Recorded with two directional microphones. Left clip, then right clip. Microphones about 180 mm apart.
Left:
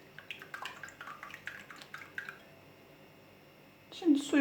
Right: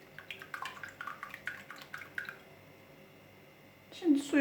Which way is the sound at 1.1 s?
5° right (ahead or behind).